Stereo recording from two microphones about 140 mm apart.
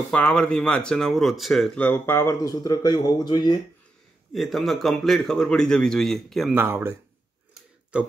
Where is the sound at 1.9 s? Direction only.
20° left (ahead or behind).